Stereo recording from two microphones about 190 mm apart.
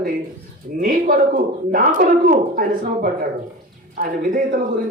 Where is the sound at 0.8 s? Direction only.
50° right (ahead or behind).